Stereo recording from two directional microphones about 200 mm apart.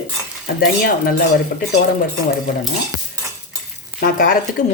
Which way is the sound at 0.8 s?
45° left (ahead or behind).